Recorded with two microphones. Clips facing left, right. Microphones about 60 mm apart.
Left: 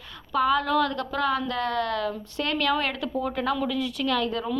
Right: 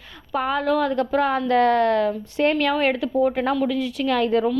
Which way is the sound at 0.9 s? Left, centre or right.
Right.